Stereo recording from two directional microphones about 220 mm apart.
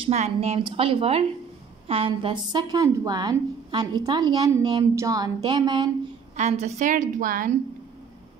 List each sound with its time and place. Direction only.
0.0 s a woman's voice: 30° right (ahead or behind)
6.3 s a woman's voice: 30° right (ahead or behind)